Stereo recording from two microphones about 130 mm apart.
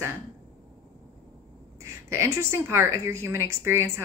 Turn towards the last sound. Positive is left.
turn(degrees=-20)  # may be behind; listen again after turning